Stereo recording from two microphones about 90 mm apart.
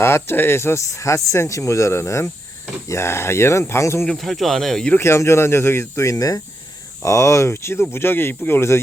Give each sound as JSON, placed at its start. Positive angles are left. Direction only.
{"t": 0.0, "sound": "speech", "side_deg": 25}
{"t": 4.0, "sound": "speech", "side_deg": 0}
{"t": 4.9, "sound": "speech", "side_deg": 30}